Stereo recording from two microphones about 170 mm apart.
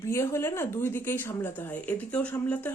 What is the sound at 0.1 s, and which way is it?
Speech, 15° left (ahead or behind).